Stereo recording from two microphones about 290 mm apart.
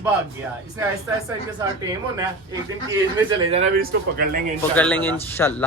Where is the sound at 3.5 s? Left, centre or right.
Right.